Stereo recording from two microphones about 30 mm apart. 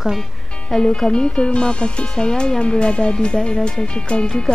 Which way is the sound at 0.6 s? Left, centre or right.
Left.